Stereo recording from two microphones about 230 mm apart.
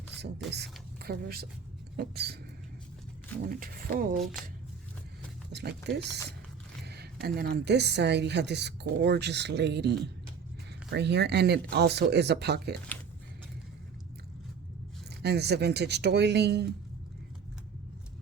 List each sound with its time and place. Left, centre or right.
0.2 s a woman's voice: right
3.5 s speech: right
4.2 s speech: centre
5.5 s a woman's voice: right
15.2 s a woman's voice: right